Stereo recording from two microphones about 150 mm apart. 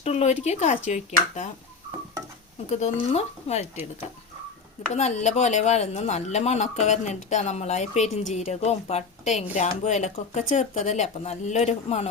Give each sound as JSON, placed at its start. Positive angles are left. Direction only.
{"t": 0.0, "sound": "speech", "side_deg": 45}
{"t": 2.6, "sound": "speech", "side_deg": 45}
{"t": 4.9, "sound": "speech", "side_deg": 50}